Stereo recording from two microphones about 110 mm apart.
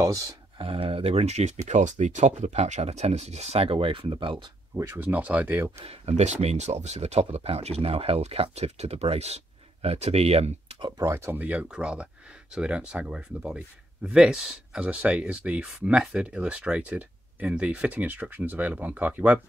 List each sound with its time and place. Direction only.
0.6 s speech: 55° right (ahead or behind)
4.7 s speech: 20° right (ahead or behind)
5.8 s speech: 70° right (ahead or behind)
10.9 s speech: 30° right (ahead or behind); by 19.4 s 15° right (ahead or behind)